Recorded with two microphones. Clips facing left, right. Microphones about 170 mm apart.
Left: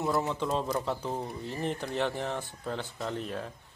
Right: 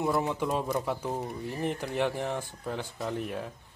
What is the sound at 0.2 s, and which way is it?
Speech, 15° right (ahead or behind).